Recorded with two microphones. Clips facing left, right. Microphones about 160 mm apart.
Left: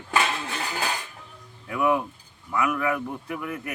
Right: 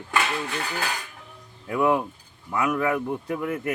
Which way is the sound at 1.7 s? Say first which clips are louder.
Right 2 dB; 30° right (ahead or behind).